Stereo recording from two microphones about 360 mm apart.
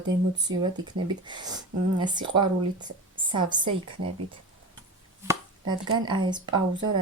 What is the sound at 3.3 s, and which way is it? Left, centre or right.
Speech, centre.